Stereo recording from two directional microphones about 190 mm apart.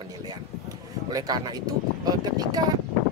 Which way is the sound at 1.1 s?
20° right (ahead or behind).